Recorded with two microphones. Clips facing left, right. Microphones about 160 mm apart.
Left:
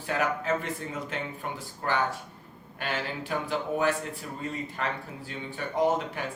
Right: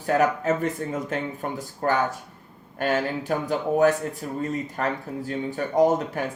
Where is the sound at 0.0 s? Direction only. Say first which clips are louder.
Right 7 dB; 45° right (ahead or behind).